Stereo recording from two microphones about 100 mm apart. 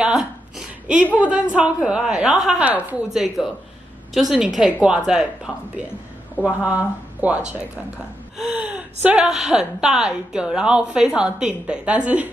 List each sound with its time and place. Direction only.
0.0 s a sound: 10° right (ahead or behind)
1.1 s a woman's voice: 15° right (ahead or behind)
9.0 s a woman's voice: 10° right (ahead or behind)